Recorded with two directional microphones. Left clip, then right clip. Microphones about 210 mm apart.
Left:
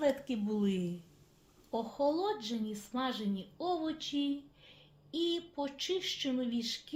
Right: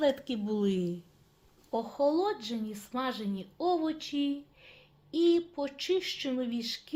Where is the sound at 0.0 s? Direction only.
35° right (ahead or behind).